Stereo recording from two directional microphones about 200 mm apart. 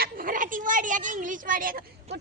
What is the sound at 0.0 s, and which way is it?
A woman's voice, 45° right (ahead or behind).